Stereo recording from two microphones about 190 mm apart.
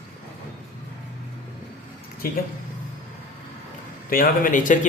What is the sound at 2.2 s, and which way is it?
Speech, 50° left (ahead or behind).